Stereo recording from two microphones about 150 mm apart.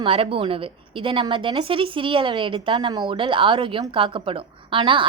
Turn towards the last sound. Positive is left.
turn(degrees=-35)  # may be behind; listen again after turning